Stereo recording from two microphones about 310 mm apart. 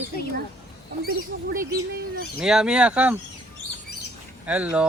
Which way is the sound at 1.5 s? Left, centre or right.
Right.